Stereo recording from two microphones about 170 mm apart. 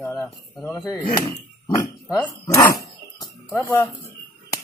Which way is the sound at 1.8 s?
20° left (ahead or behind).